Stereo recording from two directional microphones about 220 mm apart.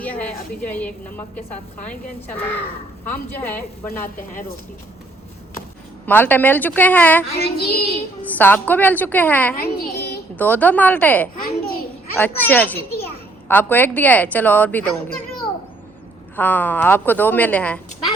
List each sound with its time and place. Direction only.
0.0 s a woman's voice: 5° left (ahead or behind)
6.1 s a woman's voice: 10° left (ahead or behind)
7.3 s child singing: 45° left (ahead or behind)
8.3 s a woman's voice: 10° left (ahead or behind)
9.6 s a child's voice: 45° left (ahead or behind)
10.3 s a woman's voice: 10° left (ahead or behind)
16.3 s a woman's voice: 10° left (ahead or behind)